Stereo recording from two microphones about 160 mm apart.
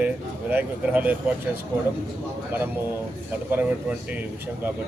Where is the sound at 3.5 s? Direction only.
10° right (ahead or behind).